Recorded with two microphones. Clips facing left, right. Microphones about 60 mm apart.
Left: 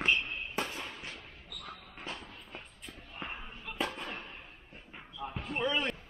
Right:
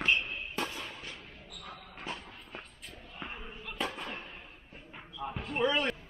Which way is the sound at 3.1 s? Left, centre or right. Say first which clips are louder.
Left 1 dB; left.